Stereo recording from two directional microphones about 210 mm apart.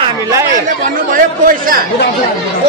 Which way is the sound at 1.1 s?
40° right (ahead or behind).